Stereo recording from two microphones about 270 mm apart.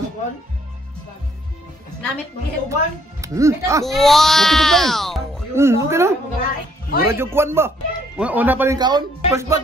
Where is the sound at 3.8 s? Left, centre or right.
Centre.